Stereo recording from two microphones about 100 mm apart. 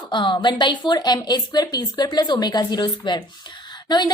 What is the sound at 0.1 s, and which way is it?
A woman's voice, 50° left (ahead or behind).